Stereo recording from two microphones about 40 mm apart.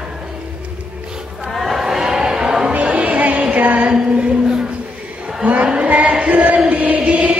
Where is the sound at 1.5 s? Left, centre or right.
Centre.